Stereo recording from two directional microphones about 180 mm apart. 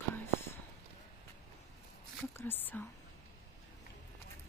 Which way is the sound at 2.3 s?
10° left (ahead or behind).